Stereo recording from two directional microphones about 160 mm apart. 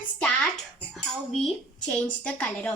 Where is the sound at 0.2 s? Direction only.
Centre (ahead or behind).